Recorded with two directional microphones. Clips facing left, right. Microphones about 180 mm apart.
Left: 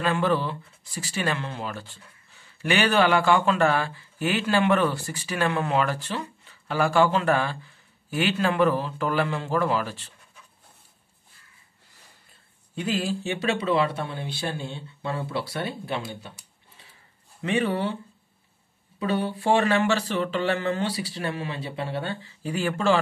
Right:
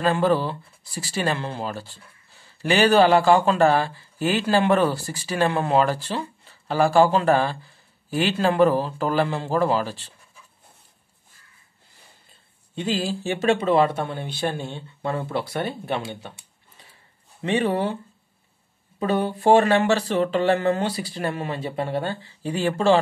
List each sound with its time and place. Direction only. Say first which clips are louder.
0.0 s speech: right 4 dB; 35° right (ahead or behind)
12.7 s speech: right 2 dB; 30° right (ahead or behind)
13.4 s speech: right 6 dB; 45° right (ahead or behind)
17.4 s speech: right 3 dB; 35° right (ahead or behind)
18.9 s speech: right 3 dB; 45° right (ahead or behind)